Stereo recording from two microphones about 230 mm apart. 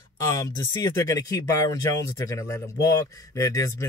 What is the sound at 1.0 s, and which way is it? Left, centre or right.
Speech, centre.